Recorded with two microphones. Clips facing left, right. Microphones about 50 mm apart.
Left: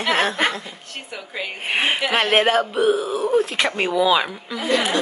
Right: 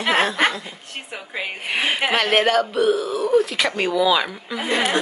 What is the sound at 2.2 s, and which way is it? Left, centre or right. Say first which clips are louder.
Speech: left 1 dB; left.